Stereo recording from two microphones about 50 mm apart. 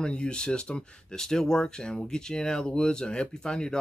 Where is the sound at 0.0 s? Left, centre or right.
Centre.